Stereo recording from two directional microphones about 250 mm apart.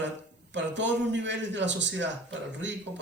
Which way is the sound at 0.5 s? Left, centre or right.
Right.